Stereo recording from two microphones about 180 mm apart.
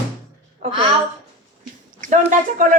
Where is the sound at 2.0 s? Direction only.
45° right (ahead or behind).